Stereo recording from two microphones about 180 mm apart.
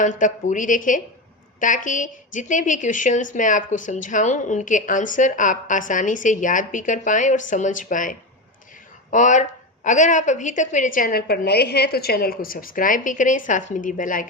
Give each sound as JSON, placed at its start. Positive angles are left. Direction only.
{"t": 0.0, "sound": "speech", "side_deg": 45}